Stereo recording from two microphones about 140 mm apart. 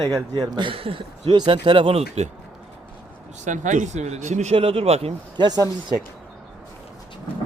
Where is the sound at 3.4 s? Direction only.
65° right (ahead or behind); by 5.1 s 45° right (ahead or behind).